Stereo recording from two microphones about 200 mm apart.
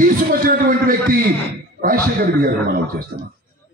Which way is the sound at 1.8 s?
45° right (ahead or behind).